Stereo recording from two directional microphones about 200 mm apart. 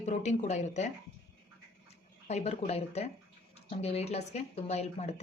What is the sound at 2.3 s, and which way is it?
A woman's voice, 35° left (ahead or behind).